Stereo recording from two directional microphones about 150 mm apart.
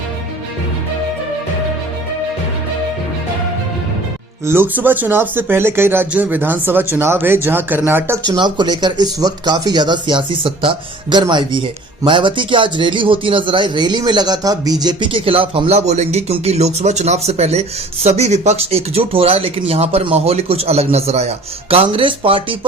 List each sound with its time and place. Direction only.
4.4 s speech: 15° right (ahead or behind)
8.4 s speech: 30° right (ahead or behind)